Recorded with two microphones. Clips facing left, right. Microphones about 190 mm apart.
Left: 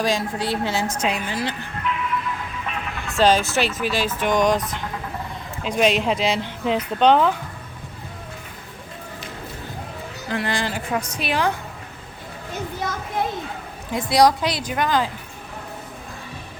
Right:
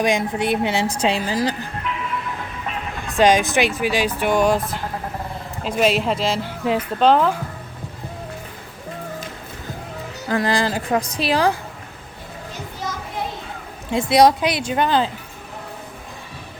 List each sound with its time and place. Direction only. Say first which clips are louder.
0.0 s a woman's voice: right 3 dB; 20° right (ahead or behind)
0.9 s a woman's voice: right 4 dB; 30° right (ahead or behind)
3.1 s speech: right 2 dB; 15° right (ahead or behind)
10.2 s a woman's voice: right 5 dB; 40° right (ahead or behind)
13.9 s a woman's voice: right 3 dB; 25° right (ahead or behind)